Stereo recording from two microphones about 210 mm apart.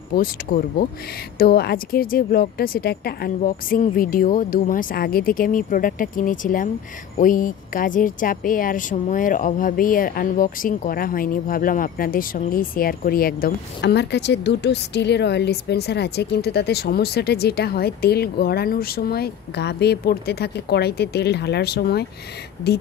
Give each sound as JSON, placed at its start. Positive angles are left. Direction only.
{"t": 0.1, "sound": "speech", "side_deg": 45}